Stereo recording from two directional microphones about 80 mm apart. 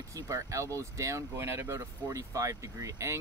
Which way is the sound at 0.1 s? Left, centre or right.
Right.